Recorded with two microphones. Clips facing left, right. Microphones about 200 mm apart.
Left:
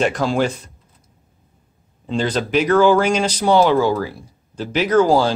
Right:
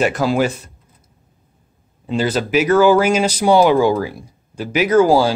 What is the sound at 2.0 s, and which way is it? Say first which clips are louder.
Speech: right 2 dB; 5° right (ahead or behind).